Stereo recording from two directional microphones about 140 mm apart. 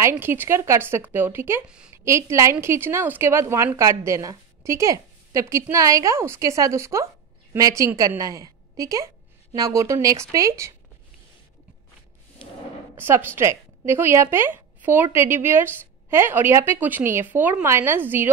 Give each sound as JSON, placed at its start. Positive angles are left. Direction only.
{"t": 0.2, "sound": "a woman's voice", "side_deg": -15}
{"t": 12.9, "sound": "a woman's voice", "side_deg": -15}